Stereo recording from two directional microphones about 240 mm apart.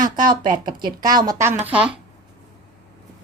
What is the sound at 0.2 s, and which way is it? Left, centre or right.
Speech, right.